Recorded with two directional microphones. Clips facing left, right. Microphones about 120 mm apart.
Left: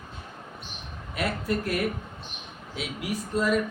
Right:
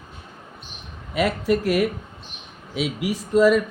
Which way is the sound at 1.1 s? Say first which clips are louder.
Right 7 dB; 90° right.